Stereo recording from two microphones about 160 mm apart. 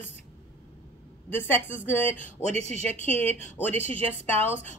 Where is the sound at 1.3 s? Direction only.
15° left (ahead or behind).